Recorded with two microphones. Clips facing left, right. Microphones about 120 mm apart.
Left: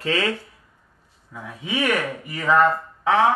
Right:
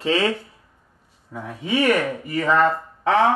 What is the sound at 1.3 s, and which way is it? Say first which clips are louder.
Speech: right 5 dB; 35° right (ahead or behind).